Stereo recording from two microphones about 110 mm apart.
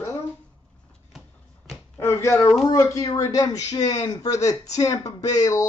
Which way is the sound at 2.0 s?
25° left (ahead or behind).